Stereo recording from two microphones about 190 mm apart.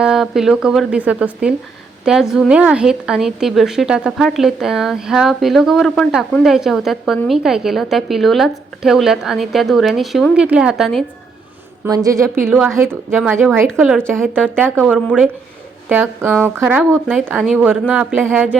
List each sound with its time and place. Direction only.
0.0 s a woman's voice: 5° right (ahead or behind)
11.9 s a woman's voice: 15° right (ahead or behind)